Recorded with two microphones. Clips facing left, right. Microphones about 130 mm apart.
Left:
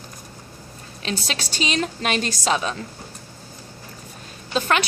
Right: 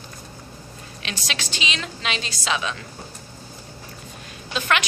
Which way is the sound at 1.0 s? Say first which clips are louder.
Left 4 dB; 40° left (ahead or behind).